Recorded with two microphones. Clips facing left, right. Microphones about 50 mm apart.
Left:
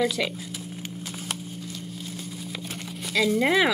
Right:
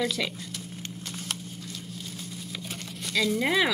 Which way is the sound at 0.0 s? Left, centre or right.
Centre.